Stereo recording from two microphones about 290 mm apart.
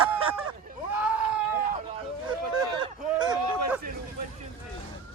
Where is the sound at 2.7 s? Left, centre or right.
Centre.